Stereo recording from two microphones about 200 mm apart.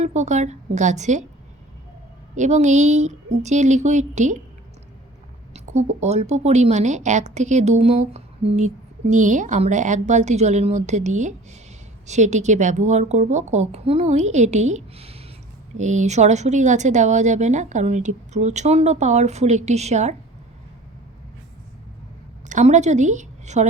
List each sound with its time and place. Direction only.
0.0 s speech: 35° right (ahead or behind)
2.3 s speech: 35° right (ahead or behind)
5.5 s speech: 35° right (ahead or behind)
22.4 s a woman's voice: 35° right (ahead or behind)